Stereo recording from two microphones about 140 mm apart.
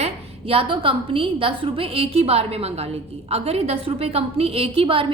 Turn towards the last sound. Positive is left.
turn(degrees=-40)  # may be behind; listen again after turning